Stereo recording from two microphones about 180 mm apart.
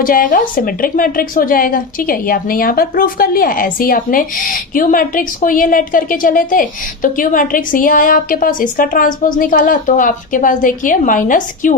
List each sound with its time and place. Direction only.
0.0 s a woman's voice: 50° left (ahead or behind)